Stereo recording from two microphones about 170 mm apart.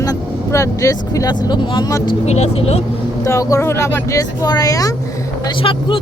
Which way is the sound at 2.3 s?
40° left (ahead or behind).